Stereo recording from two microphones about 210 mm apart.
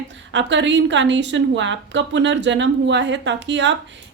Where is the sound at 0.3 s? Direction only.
60° right (ahead or behind).